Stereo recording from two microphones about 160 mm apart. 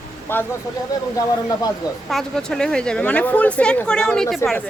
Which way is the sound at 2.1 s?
5° left (ahead or behind).